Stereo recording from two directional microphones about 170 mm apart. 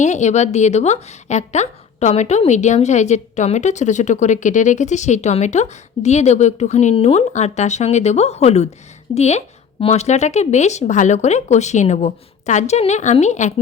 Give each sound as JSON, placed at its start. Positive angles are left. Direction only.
{"t": 0.0, "sound": "a woman's voice", "side_deg": 45}